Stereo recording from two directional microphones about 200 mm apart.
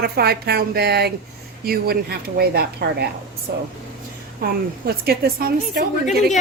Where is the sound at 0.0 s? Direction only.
55° right (ahead or behind).